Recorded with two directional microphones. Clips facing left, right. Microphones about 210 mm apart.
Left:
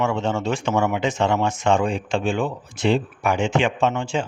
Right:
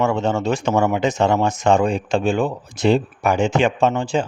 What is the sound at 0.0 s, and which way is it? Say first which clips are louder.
Speech: right 3 dB; 40° right (ahead or behind).